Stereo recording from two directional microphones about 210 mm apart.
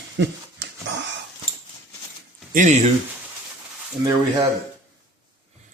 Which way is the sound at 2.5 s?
35° right (ahead or behind).